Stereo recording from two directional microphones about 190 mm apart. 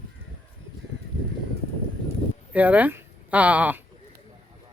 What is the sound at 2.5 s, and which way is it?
Speech, 10° right (ahead or behind).